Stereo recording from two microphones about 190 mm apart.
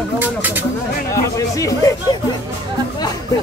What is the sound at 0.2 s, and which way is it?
Speech, 10° right (ahead or behind).